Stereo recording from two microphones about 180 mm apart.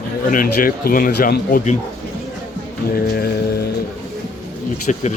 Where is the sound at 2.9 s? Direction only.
55° left (ahead or behind).